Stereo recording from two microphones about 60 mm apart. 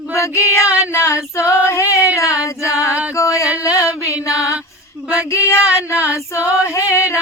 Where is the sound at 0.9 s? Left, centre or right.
Left.